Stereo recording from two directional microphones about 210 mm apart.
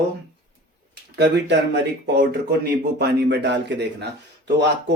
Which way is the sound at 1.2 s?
55° right (ahead or behind).